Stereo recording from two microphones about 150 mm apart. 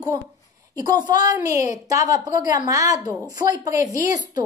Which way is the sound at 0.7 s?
30° right (ahead or behind).